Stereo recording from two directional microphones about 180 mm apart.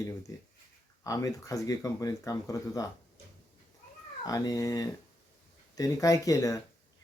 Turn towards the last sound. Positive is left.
turn(degrees=20)  # may be behind; listen again after turning